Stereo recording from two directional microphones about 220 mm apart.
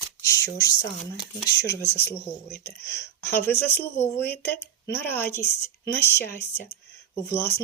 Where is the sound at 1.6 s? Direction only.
15° left (ahead or behind).